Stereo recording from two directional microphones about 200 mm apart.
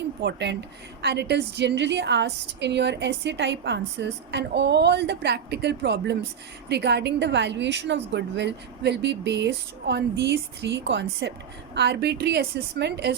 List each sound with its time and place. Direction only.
0.2 s a woman's voice: 55° right (ahead or behind)